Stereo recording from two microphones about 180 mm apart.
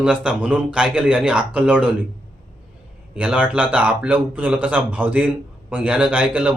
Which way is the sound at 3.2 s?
5° right (ahead or behind).